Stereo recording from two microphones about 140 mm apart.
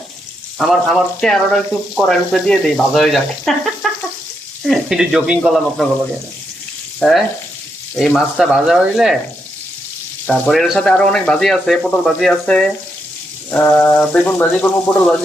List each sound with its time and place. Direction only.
0.6 s speech: centre (ahead or behind)
7.0 s frying: 10° left (ahead or behind)
7.9 s speech: centre (ahead or behind)
10.2 s speech: 10° left (ahead or behind)
13.5 s frying: 10° left (ahead or behind)